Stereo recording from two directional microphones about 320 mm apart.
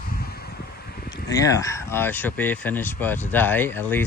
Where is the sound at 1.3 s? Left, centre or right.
Centre.